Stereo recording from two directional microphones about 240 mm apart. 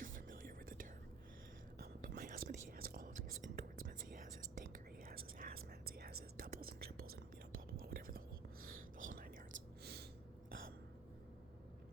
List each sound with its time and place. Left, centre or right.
0.0 s whispering: right
9.5 s whispering: right